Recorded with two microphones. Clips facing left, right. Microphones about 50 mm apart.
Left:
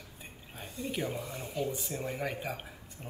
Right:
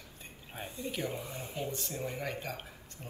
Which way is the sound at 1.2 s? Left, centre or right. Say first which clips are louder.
Left 3 dB; centre.